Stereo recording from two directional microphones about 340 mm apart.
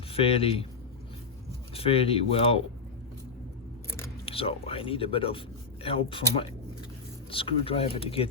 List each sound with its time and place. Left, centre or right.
0.1 s speech: centre
1.7 s speech: centre
3.9 s speech: centre